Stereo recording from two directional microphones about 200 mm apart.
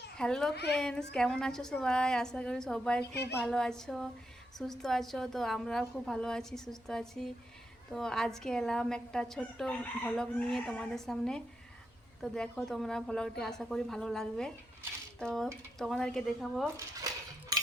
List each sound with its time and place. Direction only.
0.2 s a woman's voice: 5° left (ahead or behind)
0.5 s a woman's voice: 55° left (ahead or behind)
0.8 s a woman's voice: 5° left (ahead or behind)
16.6 s speech: 15° right (ahead or behind)